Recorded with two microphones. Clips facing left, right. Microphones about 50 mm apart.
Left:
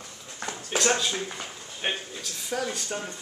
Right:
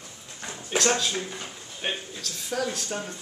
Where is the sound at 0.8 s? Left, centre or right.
Centre.